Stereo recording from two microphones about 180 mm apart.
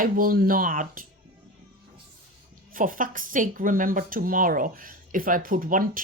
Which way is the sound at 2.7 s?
50° right (ahead or behind).